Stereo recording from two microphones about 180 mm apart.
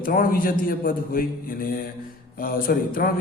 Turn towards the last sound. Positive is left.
turn(degrees=50)  # may be behind; listen again after turning